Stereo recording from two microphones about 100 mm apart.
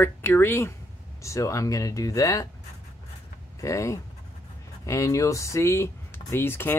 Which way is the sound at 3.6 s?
30° left (ahead or behind).